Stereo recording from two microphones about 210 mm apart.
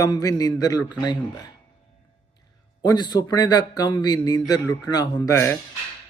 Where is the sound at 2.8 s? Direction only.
20° left (ahead or behind).